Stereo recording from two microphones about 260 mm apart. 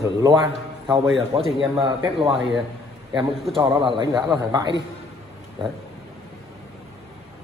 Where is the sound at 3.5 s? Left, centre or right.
Centre.